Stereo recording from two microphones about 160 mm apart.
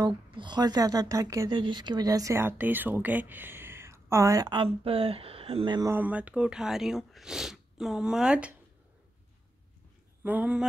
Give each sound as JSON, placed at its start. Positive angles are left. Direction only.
{"t": 0.0, "sound": "speech", "side_deg": -30}
{"t": 5.9, "sound": "speech", "side_deg": -10}
{"t": 10.2, "sound": "speech", "side_deg": -10}